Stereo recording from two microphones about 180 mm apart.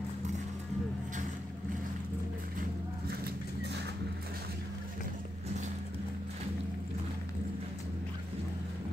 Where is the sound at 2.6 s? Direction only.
60° right (ahead or behind).